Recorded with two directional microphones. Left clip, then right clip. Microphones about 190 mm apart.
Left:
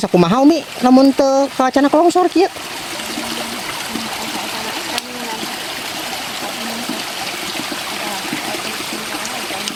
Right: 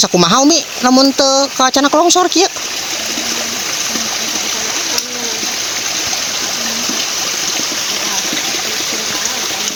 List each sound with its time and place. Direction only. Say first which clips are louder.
0.2 s speech: even; 15° left (ahead or behind)